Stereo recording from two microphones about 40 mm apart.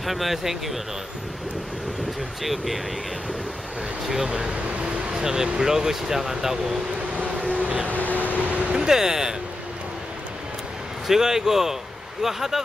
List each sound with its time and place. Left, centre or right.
0.0 s speech: centre
2.4 s speech: centre
4.1 s a sound: centre
5.2 s speech: centre
7.2 s vehicle: right
7.9 s vehicle: left
8.4 s vehicle: right
8.7 s speech: centre
11.1 s speech: centre